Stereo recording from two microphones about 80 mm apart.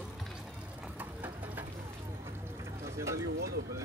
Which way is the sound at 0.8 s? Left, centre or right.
Right.